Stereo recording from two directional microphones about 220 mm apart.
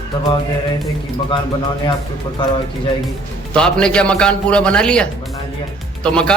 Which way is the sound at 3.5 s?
5° left (ahead or behind).